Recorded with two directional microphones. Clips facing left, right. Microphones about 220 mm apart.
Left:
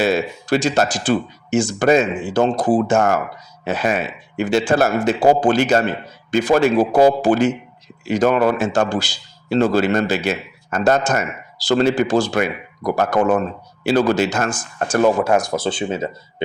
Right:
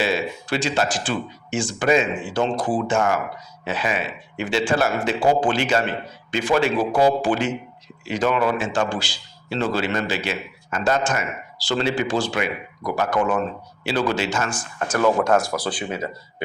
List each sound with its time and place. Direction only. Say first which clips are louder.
0.0 s a man's voice: left 5 dB; 45° left (ahead or behind)
14.3 s speech: left 4 dB; 65° left (ahead or behind)
15.2 s speech: left 2 dB; 15° left (ahead or behind)